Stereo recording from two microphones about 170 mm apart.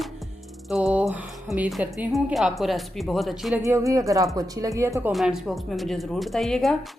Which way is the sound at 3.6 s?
15° right (ahead or behind).